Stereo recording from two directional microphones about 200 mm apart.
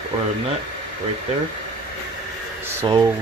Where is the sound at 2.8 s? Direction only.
15° right (ahead or behind).